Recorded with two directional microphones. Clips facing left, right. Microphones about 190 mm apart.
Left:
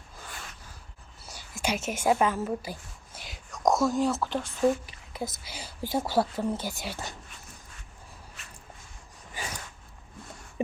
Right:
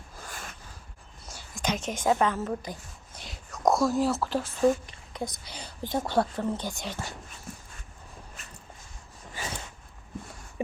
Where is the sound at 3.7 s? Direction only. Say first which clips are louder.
Even; centre (ahead or behind).